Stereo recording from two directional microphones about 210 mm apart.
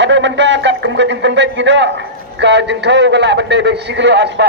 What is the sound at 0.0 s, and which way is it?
Speech, 60° right (ahead or behind).